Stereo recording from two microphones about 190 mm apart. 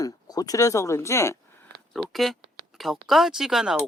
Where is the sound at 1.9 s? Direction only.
Centre (ahead or behind).